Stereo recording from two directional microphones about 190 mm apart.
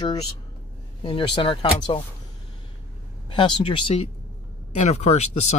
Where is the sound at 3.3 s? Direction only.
25° left (ahead or behind).